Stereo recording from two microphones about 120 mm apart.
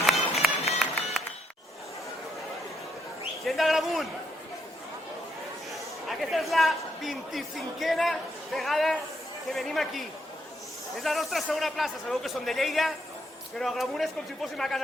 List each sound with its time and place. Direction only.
0.0 s run: centre (ahead or behind)
0.8 s music: centre (ahead or behind)
3.4 s a sound: centre (ahead or behind)
6.1 s a man's voice: centre (ahead or behind)